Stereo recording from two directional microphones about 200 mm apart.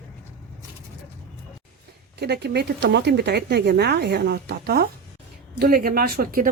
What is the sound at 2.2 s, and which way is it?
Speech, 55° right (ahead or behind).